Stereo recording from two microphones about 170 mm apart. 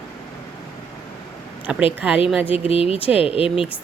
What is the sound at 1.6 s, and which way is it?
Speech, 10° right (ahead or behind).